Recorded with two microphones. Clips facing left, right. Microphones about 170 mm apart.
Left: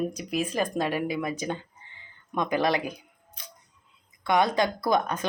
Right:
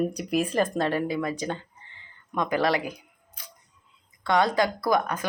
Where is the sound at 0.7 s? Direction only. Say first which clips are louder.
Right 2 dB; 10° left (ahead or behind).